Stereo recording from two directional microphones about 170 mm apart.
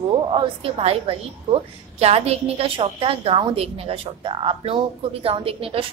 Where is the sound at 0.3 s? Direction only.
30° right (ahead or behind).